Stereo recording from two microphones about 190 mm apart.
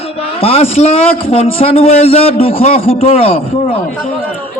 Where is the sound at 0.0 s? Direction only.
30° left (ahead or behind).